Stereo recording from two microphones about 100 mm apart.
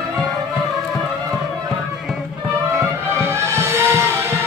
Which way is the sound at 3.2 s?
30° right (ahead or behind).